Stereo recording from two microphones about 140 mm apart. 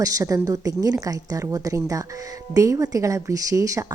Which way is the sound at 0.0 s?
25° right (ahead or behind).